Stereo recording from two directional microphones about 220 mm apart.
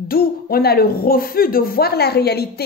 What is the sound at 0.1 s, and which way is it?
Speech, 45° left (ahead or behind).